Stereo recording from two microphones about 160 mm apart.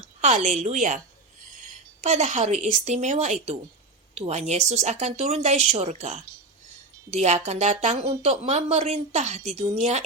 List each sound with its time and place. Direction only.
0.0 s a woman's voice: 45° right (ahead or behind)